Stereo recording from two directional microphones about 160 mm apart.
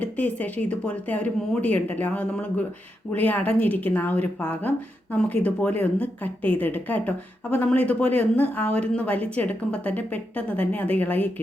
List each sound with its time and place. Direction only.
0.0 s speech: 10° left (ahead or behind)